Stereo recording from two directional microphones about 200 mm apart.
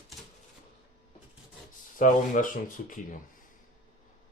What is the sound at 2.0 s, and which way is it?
Speech, 40° left (ahead or behind).